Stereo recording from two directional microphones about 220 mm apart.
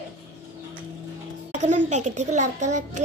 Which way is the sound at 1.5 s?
35° right (ahead or behind).